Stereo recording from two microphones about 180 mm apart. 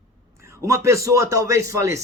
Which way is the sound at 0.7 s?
15° right (ahead or behind).